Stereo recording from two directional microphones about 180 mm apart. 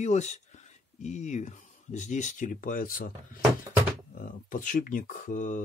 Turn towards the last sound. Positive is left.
turn(degrees=45)  # may be behind; listen again after turning